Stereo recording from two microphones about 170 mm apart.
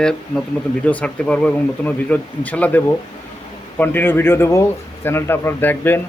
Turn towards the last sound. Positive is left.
turn(degrees=10)  # may be behind; listen again after turning